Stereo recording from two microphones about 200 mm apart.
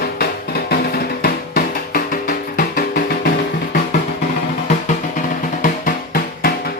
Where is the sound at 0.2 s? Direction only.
50° left (ahead or behind).